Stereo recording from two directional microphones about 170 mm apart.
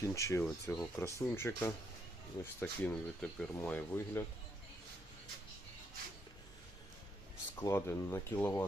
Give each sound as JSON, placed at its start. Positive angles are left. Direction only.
{"t": 0.0, "sound": "speech", "side_deg": 15}
{"t": 7.6, "sound": "speech", "side_deg": 15}